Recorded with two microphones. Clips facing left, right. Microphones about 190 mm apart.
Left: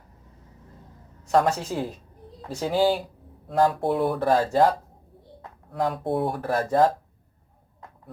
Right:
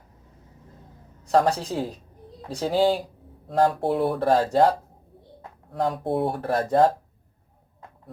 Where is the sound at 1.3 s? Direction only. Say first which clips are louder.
Right 1 dB; 35° right (ahead or behind).